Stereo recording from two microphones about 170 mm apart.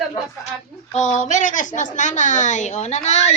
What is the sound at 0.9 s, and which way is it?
Speech, 45° left (ahead or behind).